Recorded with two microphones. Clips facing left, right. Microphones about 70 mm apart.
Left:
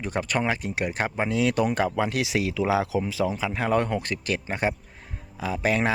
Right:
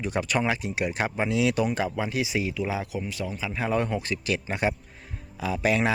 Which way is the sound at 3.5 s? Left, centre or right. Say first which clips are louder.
Left 2 dB; left.